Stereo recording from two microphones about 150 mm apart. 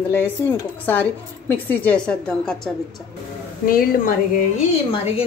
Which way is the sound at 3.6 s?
75° left (ahead or behind).